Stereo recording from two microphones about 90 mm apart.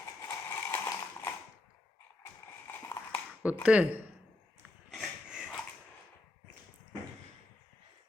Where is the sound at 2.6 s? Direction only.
30° left (ahead or behind).